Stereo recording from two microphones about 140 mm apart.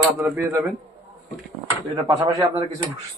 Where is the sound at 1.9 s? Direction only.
25° right (ahead or behind).